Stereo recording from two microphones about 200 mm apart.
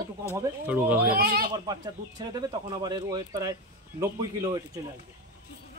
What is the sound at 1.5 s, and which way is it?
A man's voice, 20° right (ahead or behind).